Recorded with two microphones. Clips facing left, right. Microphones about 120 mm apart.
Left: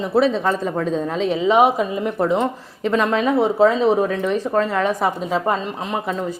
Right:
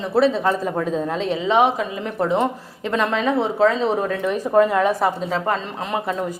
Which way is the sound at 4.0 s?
Centre (ahead or behind).